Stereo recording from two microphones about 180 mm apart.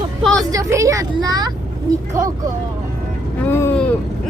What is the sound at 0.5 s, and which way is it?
Speech, 20° right (ahead or behind).